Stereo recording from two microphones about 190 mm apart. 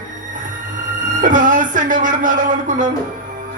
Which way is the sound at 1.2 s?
45° right (ahead or behind).